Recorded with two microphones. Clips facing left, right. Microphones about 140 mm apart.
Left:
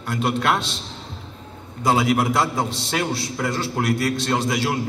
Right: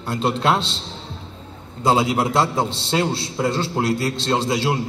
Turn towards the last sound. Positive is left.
turn(degrees=-25)  # may be behind; listen again after turning